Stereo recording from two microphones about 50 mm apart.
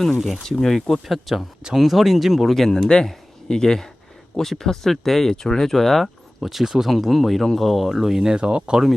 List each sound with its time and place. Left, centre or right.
0.4 s speech: centre
2.6 s speech: centre
8.4 s speech: right